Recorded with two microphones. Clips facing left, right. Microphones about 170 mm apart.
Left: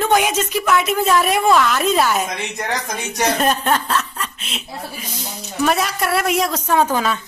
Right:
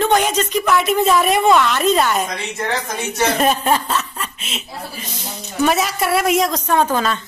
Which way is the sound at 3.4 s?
5° right (ahead or behind).